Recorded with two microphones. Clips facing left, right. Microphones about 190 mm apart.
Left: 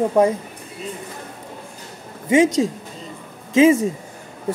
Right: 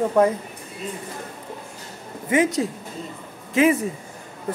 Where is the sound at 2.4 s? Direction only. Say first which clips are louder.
Left 5 dB; 90° left.